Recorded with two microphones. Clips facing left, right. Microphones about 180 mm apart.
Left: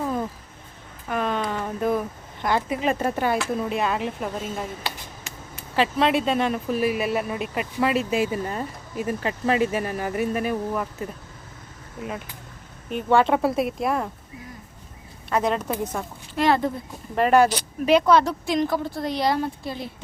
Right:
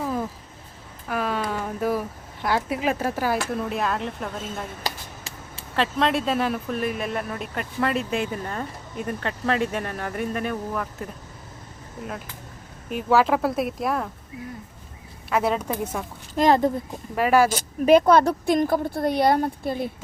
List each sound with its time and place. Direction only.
0.0 s a sound: 5° right (ahead or behind)
3.5 s speech: centre (ahead or behind)
4.8 s finger snapping: 35° right (ahead or behind)
5.7 s speech: 5° left (ahead or behind)
12.9 s speech: 5° right (ahead or behind)
15.3 s a woman's voice: 5° right (ahead or behind)
16.3 s a child's voice: 40° right (ahead or behind)
17.2 s a woman's voice: 5° right (ahead or behind)
17.5 s a woman's voice: 45° right (ahead or behind)